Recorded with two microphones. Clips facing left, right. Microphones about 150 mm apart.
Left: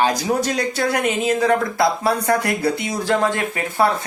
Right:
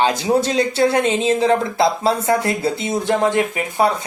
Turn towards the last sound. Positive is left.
turn(degrees=-15)  # may be behind; listen again after turning